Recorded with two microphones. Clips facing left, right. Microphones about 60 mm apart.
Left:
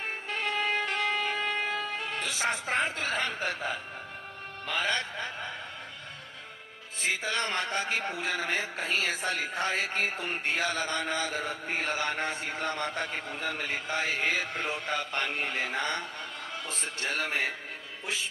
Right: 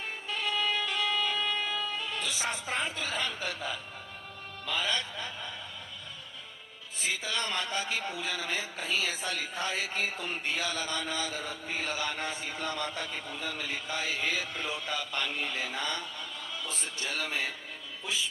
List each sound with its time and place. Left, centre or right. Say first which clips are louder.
0.0 s music: left 2 dB; left
4.6 s a man's voice: left 2 dB; left
7.0 s a man's voice: left 3 dB; left